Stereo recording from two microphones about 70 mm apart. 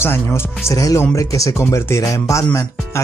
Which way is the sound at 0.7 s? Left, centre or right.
Left.